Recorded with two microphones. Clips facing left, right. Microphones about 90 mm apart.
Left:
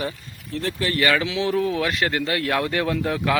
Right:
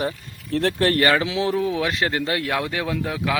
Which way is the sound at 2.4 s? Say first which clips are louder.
Left 2 dB; 10° right (ahead or behind).